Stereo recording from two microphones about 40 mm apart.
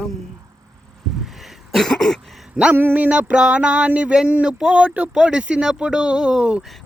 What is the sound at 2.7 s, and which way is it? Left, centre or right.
Speech, right.